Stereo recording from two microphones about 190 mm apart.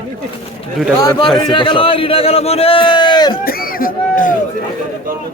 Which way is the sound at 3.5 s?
50° left (ahead or behind).